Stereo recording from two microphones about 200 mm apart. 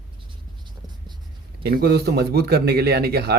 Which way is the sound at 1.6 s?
50° right (ahead or behind).